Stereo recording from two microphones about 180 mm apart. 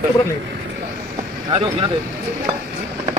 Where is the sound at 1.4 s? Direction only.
25° right (ahead or behind).